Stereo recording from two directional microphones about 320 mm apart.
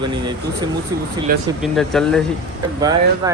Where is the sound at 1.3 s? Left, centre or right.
Right.